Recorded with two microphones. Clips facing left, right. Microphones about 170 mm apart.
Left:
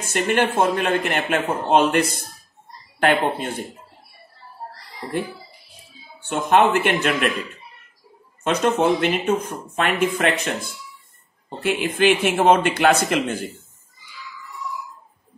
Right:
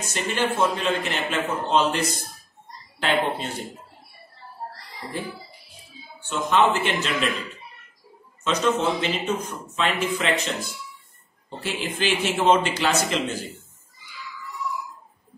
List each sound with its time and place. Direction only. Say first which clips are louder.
0.0 s speech: left 5 dB; 55° left (ahead or behind)
6.2 s speech: left 3 dB; 55° left (ahead or behind)
8.5 s speech: left 4 dB; 55° left (ahead or behind)